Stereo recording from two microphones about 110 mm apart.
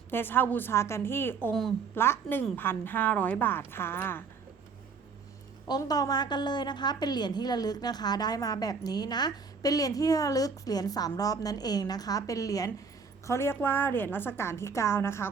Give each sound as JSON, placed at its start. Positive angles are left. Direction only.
{"t": 0.1, "sound": "a woman's voice", "side_deg": 20}
{"t": 5.6, "sound": "a woman's voice", "side_deg": 35}